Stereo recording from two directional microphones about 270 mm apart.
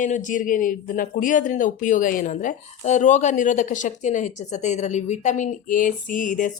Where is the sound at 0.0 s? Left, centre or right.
Left.